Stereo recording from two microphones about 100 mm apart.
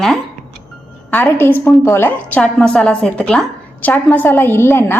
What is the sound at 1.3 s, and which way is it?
A woman's voice, 20° left (ahead or behind).